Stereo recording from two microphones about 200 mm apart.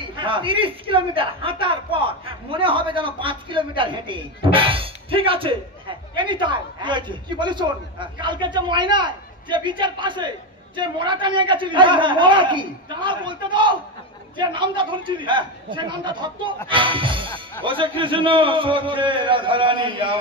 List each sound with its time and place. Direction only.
0.0 s a man's voice: 25° right (ahead or behind)